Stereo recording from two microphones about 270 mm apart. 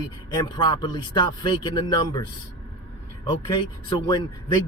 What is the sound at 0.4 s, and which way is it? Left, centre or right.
Speech, centre.